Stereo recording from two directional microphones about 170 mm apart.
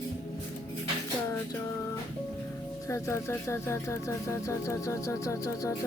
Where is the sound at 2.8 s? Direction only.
15° left (ahead or behind).